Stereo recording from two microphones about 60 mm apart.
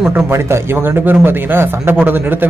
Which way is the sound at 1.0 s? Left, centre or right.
Right.